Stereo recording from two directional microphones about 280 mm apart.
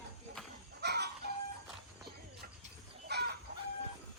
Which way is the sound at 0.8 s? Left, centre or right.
Right.